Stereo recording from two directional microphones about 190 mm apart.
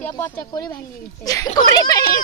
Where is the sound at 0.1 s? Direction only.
20° left (ahead or behind).